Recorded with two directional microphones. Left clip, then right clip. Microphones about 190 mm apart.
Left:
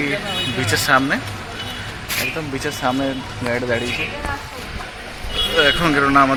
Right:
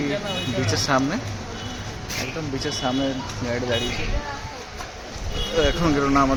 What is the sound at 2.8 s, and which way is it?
Speech, 25° left (ahead or behind).